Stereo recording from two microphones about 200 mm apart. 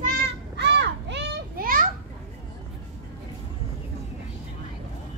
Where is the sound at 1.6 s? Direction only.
45° right (ahead or behind).